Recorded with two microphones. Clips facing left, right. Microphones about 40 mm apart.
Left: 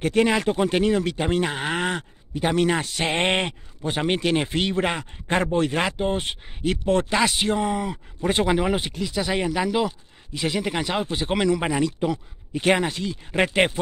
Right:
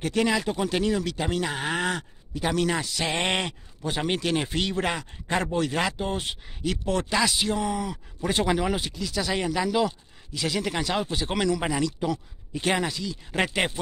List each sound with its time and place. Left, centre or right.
0.0 s speech: left
7.5 s speech: left
8.5 s speech: left